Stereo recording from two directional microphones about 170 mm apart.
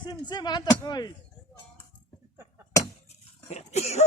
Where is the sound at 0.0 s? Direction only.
25° left (ahead or behind).